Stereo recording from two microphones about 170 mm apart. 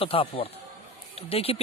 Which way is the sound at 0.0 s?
35° left (ahead or behind).